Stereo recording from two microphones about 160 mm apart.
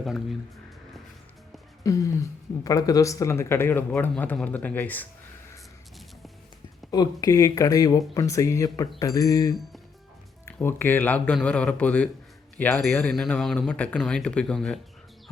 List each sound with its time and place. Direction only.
0.0 s speech: centre (ahead or behind)
1.8 s speech: 20° left (ahead or behind)
6.9 s speech: 25° left (ahead or behind)
10.6 s speech: 15° left (ahead or behind)